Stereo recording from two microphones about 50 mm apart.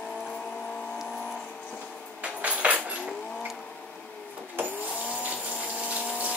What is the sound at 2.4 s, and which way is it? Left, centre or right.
Tambourine, right.